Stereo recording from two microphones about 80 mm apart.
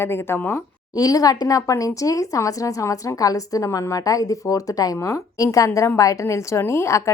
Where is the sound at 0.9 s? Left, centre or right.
Left.